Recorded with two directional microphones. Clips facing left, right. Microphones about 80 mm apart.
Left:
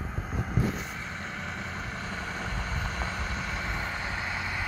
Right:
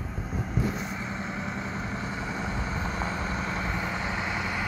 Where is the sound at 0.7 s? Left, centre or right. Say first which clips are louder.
Right 4 dB; centre.